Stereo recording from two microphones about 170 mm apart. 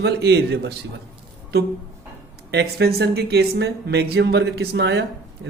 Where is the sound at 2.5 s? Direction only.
80° right.